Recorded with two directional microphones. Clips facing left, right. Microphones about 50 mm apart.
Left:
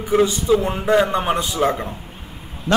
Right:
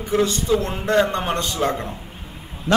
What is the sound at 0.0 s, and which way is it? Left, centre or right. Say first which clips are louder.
A man's voice: left 3 dB; centre.